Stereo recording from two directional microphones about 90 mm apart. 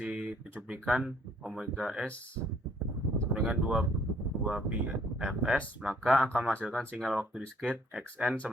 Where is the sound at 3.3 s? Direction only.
10° right (ahead or behind).